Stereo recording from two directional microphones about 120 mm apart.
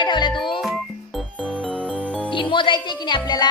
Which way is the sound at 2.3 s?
45° left (ahead or behind).